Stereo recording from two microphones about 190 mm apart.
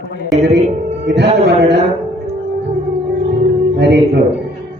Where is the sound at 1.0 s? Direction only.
65° right (ahead or behind).